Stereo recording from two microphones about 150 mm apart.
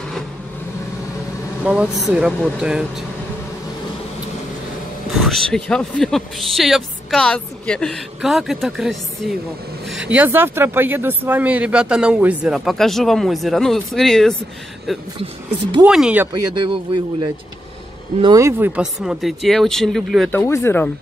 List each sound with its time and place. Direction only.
1.6 s speech: 10° right (ahead or behind)
5.2 s speech: 5° left (ahead or behind)
16.5 s speech: 30° right (ahead or behind)
18.2 s speech: 25° right (ahead or behind)
18.6 s speech: 5° right (ahead or behind)
20.2 s speech: 15° left (ahead or behind)